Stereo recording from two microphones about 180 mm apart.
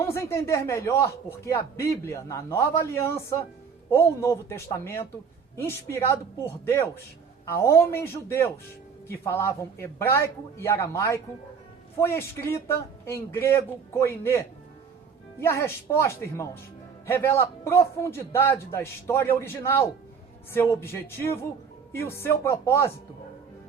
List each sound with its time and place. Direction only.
0.0 s speech: 15° left (ahead or behind)